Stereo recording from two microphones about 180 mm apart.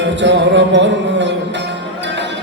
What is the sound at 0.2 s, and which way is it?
Music, 90° right.